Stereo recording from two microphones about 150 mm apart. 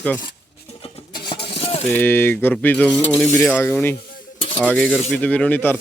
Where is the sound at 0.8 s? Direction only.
35° left (ahead or behind).